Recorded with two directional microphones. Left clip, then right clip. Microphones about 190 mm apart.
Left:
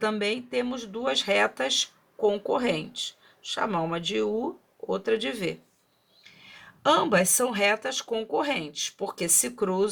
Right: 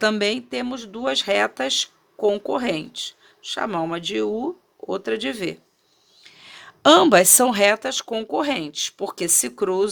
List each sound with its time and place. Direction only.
0.0 s speech: 50° right (ahead or behind)